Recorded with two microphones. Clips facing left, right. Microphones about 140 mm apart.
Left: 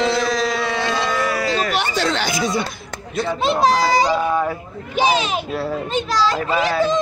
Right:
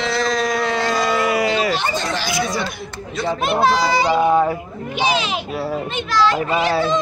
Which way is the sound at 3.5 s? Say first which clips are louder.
Left 1 dB; 40° left (ahead or behind).